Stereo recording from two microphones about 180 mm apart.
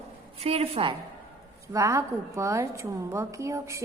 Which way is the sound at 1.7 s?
15° right (ahead or behind).